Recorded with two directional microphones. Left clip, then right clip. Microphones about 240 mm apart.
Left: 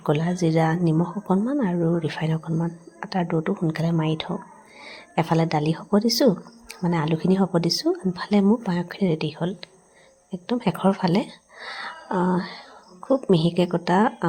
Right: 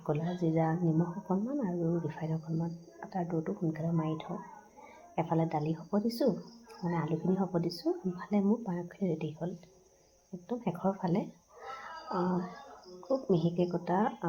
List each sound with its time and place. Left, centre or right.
0.0 s a woman's voice: left
11.8 s a sound: left
13.1 s a woman's voice: left